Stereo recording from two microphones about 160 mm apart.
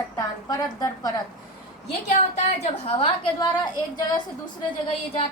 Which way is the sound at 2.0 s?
45° left (ahead or behind).